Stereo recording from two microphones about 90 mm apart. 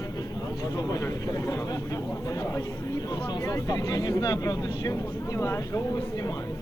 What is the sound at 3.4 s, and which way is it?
Speech, 40° left (ahead or behind).